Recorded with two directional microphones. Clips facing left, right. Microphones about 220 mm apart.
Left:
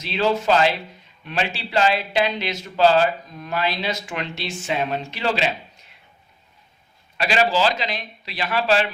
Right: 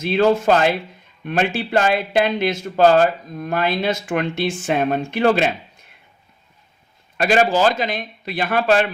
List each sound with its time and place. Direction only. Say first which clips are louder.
0.0 s speech: right 6 dB; 50° right (ahead or behind)
7.2 s speech: right 4 dB; 50° right (ahead or behind)